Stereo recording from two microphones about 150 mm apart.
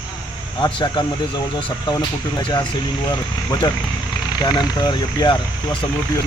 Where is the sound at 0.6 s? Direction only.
30° left (ahead or behind).